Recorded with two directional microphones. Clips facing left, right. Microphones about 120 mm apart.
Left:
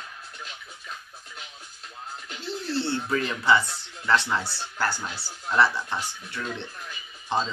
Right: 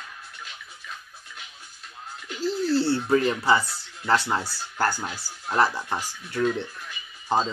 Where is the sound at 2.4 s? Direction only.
35° right (ahead or behind).